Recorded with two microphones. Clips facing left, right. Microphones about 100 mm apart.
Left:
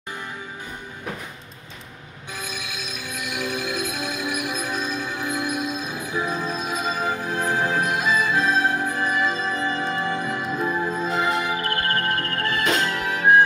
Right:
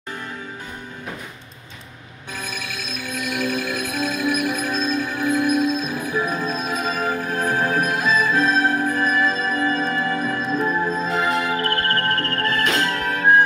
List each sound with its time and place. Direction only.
2.3 s music: 15° left (ahead or behind)